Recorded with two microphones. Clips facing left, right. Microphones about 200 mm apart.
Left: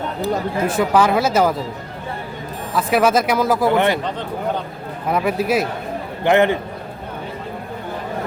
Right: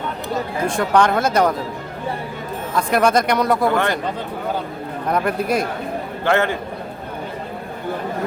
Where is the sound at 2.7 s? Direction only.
5° left (ahead or behind).